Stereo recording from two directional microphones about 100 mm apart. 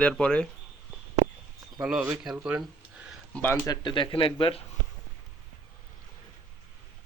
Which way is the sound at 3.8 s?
50° left (ahead or behind).